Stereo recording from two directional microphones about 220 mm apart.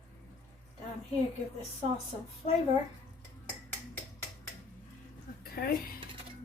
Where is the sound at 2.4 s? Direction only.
30° left (ahead or behind).